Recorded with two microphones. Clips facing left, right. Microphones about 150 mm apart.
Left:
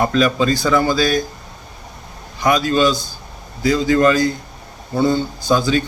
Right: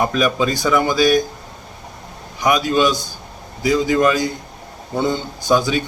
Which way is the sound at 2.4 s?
15° right (ahead or behind).